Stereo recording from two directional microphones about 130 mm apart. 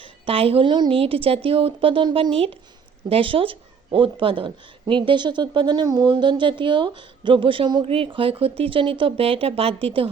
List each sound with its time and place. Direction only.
0.0 s a woman's voice: 45° right (ahead or behind)